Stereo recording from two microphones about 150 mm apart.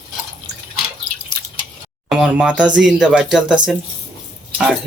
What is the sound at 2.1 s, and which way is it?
Speech, 5° right (ahead or behind).